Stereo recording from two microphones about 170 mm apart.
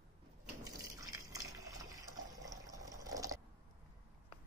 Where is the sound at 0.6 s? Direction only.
20° right (ahead or behind).